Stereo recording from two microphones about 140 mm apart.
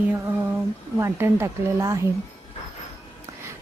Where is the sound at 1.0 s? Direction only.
20° right (ahead or behind).